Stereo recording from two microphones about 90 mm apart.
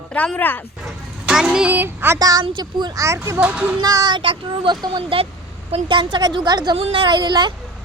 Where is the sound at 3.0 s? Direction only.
30° right (ahead or behind).